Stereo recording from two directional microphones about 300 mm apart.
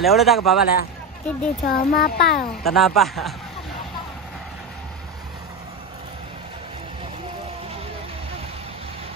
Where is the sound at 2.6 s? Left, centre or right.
Centre.